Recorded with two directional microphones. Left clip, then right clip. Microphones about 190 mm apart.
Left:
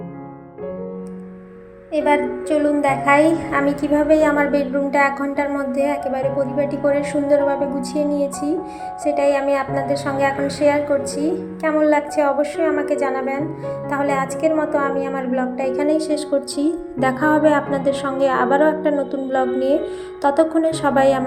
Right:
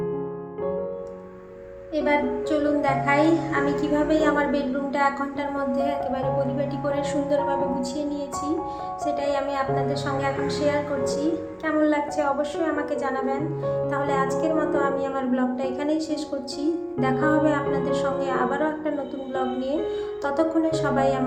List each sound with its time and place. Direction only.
2.0 s a woman's voice: 25° left (ahead or behind)
9.1 s a woman's voice: 25° left (ahead or behind)